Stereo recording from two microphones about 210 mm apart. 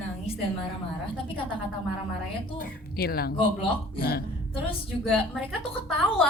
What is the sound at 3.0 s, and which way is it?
Speech, 45° left (ahead or behind).